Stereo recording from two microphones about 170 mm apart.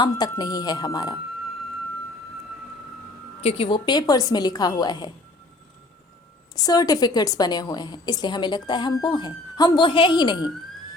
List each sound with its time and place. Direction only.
0.0 s a woman's voice: 25° left (ahead or behind)
3.4 s a woman's voice: 30° left (ahead or behind)
6.7 s a woman's voice: 20° left (ahead or behind)